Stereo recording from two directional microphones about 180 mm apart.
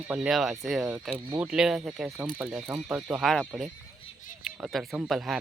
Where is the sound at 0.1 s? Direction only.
5° right (ahead or behind).